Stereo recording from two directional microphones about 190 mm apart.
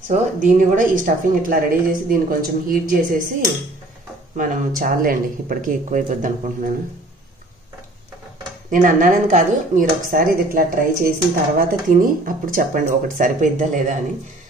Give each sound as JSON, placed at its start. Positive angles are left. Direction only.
{"t": 0.1, "sound": "speech", "side_deg": -40}
{"t": 4.4, "sound": "speech", "side_deg": -45}
{"t": 8.6, "sound": "speech", "side_deg": -45}